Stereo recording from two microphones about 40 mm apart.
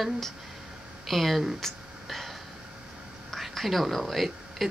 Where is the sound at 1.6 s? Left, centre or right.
Centre.